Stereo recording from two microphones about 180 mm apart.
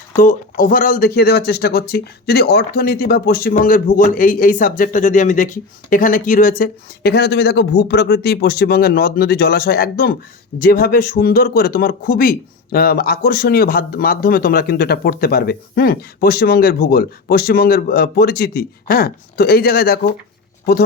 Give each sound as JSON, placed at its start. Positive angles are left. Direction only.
{"t": 0.2, "sound": "speech", "side_deg": 50}